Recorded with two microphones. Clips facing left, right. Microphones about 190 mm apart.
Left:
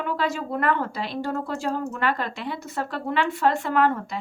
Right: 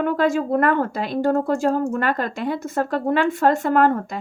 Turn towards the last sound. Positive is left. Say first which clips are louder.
# right 5 dB
turn(degrees=-45)  # may be behind; listen again after turning